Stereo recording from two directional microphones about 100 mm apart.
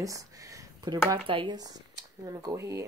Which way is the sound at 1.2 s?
60° right (ahead or behind).